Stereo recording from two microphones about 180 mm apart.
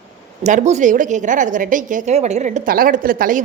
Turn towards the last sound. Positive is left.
turn(degrees=-50)  # may be behind; listen again after turning